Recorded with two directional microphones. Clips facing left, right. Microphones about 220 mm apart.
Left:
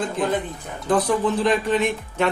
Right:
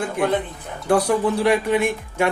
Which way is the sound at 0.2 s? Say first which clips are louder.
Right 4 dB; 10° right (ahead or behind).